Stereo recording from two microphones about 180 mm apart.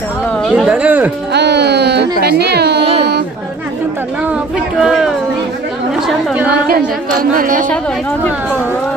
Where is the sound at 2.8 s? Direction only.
35° right (ahead or behind).